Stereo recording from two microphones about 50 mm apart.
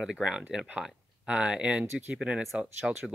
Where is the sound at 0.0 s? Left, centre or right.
Centre.